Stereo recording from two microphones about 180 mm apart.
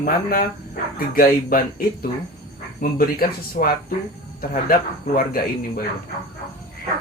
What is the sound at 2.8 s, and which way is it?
Speech, 55° left (ahead or behind).